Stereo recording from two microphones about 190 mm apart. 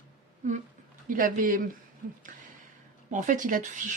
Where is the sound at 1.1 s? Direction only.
45° right (ahead or behind).